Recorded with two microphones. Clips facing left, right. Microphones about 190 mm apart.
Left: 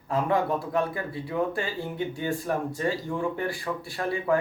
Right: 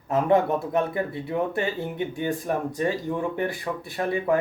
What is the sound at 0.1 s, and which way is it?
Speech, 25° right (ahead or behind).